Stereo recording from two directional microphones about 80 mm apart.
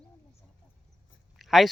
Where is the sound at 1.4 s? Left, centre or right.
Centre.